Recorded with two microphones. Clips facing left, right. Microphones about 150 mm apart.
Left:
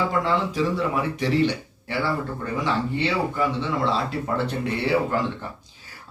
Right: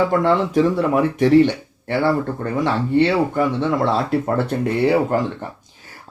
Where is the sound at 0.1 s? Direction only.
55° right (ahead or behind).